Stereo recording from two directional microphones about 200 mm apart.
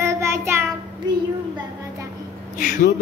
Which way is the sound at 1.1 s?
20° right (ahead or behind).